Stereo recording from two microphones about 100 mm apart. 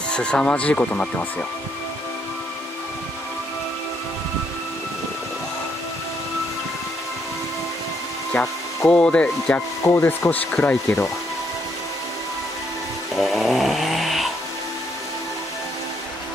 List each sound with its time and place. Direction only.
0.1 s speech: 10° left (ahead or behind)
8.3 s speech: 15° left (ahead or behind)
9.8 s speech: 25° left (ahead or behind)
13.1 s chainsaw: centre (ahead or behind)